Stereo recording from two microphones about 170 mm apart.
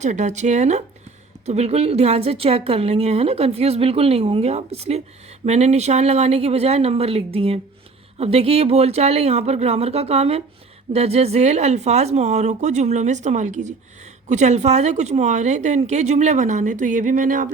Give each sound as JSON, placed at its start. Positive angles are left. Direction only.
{"t": 0.0, "sound": "a woman's voice", "side_deg": -45}